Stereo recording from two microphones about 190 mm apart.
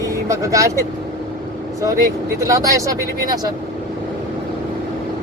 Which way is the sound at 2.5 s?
15° right (ahead or behind).